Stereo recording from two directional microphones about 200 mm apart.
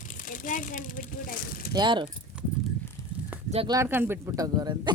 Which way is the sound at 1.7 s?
20° right (ahead or behind).